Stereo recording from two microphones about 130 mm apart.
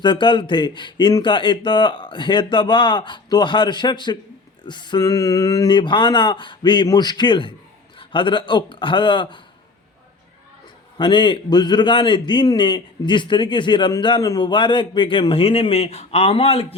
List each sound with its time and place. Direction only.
0.0 s speech: 35° left (ahead or behind)
4.6 s a sound: 35° left (ahead or behind)
5.7 s speech: 35° left (ahead or behind)
10.9 s speech: 40° left (ahead or behind)